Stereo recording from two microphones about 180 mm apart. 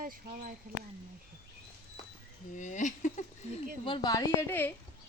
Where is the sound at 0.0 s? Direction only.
50° right (ahead or behind).